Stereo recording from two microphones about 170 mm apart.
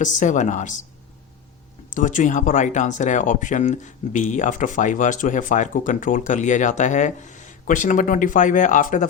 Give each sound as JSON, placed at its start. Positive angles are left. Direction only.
{"t": 0.0, "sound": "speech", "side_deg": 45}
{"t": 1.9, "sound": "speech", "side_deg": 50}